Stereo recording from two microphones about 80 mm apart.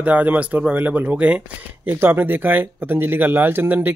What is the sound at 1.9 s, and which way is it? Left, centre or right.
Speech, right.